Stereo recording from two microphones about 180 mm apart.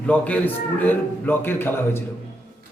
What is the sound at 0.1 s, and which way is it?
A man's voice, 10° left (ahead or behind).